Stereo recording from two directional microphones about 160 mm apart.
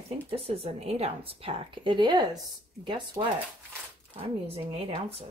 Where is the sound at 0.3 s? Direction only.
35° right (ahead or behind).